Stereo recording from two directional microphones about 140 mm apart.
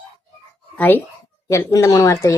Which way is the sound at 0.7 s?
15° left (ahead or behind).